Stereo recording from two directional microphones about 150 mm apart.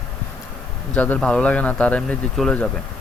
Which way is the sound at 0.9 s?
10° left (ahead or behind).